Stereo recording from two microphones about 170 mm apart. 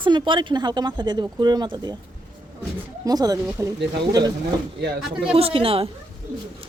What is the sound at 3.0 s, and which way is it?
Speech, 20° right (ahead or behind).